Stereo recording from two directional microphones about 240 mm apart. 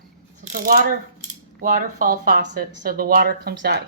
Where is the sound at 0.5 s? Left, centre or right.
Right.